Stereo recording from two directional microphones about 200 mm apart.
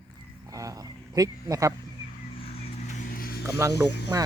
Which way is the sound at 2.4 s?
35° left (ahead or behind).